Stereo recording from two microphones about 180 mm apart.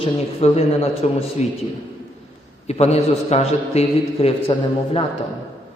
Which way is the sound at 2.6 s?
35° left (ahead or behind).